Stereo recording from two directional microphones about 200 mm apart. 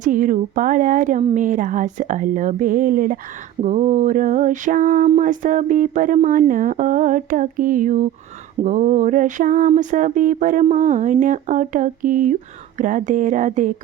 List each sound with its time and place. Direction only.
0.0 s mantra: 40° right (ahead or behind)